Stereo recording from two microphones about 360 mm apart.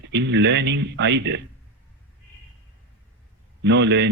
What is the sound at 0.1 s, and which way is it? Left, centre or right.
Speech, right.